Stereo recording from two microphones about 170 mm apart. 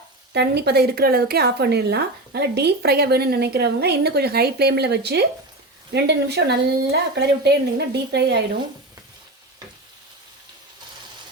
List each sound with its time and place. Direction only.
0.3 s a woman's voice: 75° right (ahead or behind)